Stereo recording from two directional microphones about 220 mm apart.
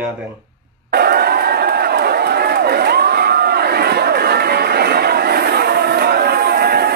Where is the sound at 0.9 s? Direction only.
45° right (ahead or behind).